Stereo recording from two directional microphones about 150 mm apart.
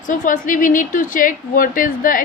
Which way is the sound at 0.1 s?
60° left (ahead or behind).